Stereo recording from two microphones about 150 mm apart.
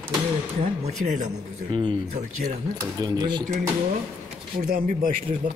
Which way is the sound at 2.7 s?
25° right (ahead or behind).